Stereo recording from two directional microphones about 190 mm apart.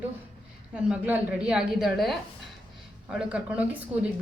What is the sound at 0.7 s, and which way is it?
A woman's voice, 5° right (ahead or behind).